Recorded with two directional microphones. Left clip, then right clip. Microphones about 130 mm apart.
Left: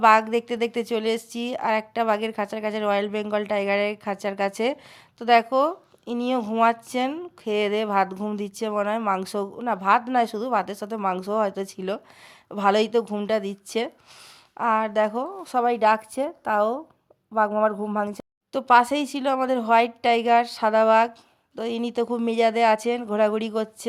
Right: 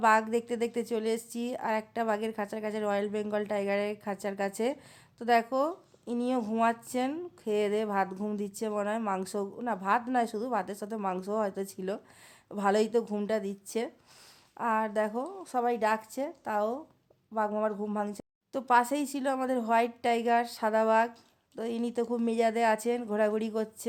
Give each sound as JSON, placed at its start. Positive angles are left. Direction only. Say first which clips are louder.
{"t": 0.0, "sound": "a woman's voice", "louder": "left 8 dB", "side_deg": 20}
{"t": 13.2, "sound": "a woman's voice", "louder": "left 7 dB", "side_deg": 25}
{"t": 15.4, "sound": "a woman's voice", "louder": "left 8 dB", "side_deg": 35}